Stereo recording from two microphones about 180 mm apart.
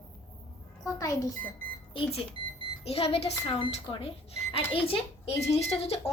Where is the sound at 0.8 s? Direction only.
20° left (ahead or behind).